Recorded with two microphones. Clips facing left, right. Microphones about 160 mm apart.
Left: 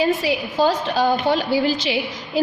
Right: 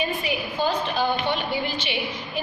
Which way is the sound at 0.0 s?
90° left.